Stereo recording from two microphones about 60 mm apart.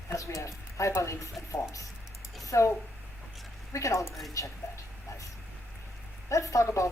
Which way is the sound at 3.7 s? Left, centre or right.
Left.